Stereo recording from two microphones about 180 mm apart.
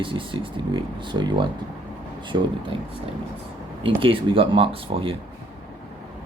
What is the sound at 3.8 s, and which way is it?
Speech, 30° right (ahead or behind).